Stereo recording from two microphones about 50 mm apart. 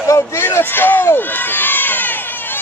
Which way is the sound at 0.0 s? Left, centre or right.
Left.